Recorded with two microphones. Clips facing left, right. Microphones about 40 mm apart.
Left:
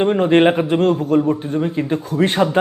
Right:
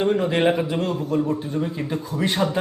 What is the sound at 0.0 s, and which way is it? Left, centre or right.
A man's voice, left.